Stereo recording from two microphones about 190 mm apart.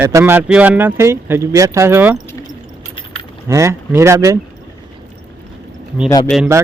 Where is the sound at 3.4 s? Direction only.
15° right (ahead or behind).